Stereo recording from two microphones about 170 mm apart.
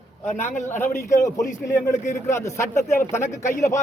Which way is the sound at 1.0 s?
20° left (ahead or behind).